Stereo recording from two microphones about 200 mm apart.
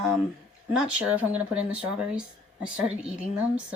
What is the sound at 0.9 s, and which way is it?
Speech, 5° right (ahead or behind).